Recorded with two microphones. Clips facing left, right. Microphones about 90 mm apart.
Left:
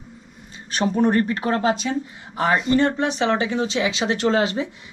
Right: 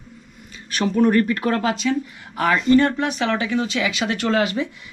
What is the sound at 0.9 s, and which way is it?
Speech, 25° left (ahead or behind).